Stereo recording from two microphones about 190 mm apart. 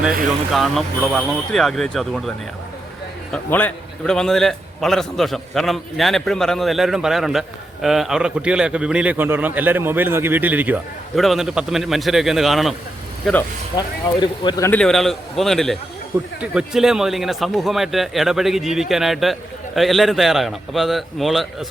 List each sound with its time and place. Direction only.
0.5 s a man's voice: centre (ahead or behind)
3.3 s a man's voice: 5° left (ahead or behind)
13.7 s speech: 20° left (ahead or behind)
14.7 s a man's voice: 5° left (ahead or behind)